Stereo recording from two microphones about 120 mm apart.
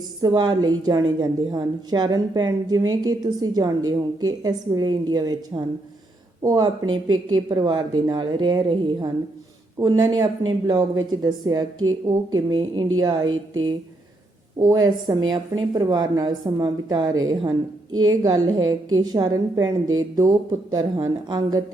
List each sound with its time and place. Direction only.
0.2 s a woman's voice: 35° right (ahead or behind)
14.7 s a woman's voice: 35° right (ahead or behind)